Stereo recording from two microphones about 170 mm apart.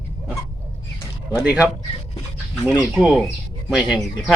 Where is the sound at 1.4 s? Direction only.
10° right (ahead or behind).